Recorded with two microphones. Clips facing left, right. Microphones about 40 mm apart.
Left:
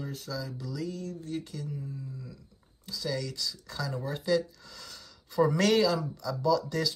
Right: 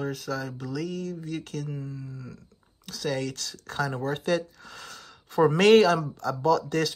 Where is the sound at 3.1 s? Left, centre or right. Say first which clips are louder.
Right 3 dB; right.